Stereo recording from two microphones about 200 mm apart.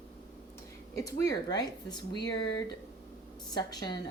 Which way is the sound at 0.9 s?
15° left (ahead or behind).